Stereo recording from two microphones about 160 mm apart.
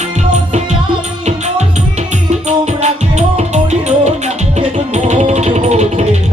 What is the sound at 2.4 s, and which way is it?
Music, 45° right (ahead or behind).